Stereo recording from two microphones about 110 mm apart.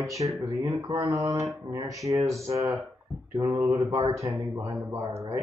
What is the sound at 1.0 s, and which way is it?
Mantra, 35° right (ahead or behind).